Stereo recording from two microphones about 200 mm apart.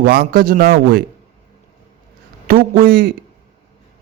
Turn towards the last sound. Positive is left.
turn(degrees=-50)  # may be behind; listen again after turning